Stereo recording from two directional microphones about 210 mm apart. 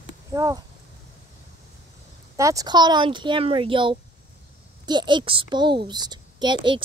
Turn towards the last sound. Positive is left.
turn(degrees=-20)  # may be behind; listen again after turning